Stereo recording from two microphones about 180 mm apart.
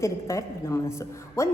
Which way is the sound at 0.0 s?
15° left (ahead or behind).